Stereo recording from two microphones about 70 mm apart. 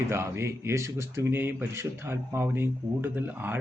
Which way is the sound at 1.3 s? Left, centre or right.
Right.